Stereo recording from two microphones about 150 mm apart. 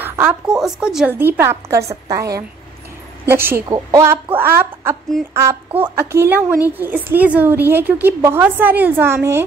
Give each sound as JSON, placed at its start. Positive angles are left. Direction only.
{"t": 0.0, "sound": "a woman's voice", "side_deg": -15}